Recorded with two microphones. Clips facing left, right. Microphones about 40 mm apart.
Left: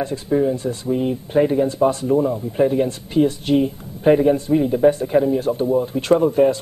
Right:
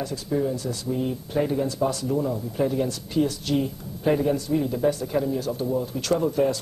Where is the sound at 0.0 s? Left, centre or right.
Left.